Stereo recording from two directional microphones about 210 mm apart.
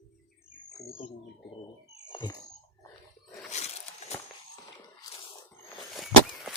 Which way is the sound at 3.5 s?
30° left (ahead or behind).